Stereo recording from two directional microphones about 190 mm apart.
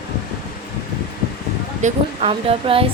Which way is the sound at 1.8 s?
35° right (ahead or behind).